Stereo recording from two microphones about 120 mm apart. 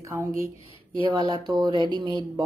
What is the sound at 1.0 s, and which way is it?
Speech, 40° right (ahead or behind).